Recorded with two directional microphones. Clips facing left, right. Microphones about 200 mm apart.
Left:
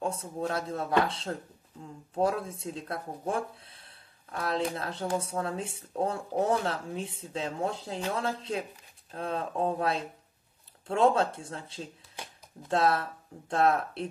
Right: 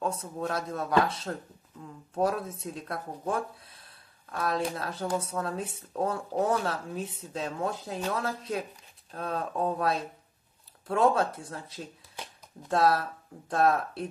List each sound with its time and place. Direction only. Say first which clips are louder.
0.0 s speech: even; 25° left (ahead or behind)